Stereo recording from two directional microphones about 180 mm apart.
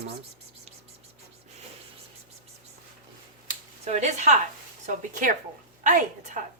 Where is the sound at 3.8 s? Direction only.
40° right (ahead or behind).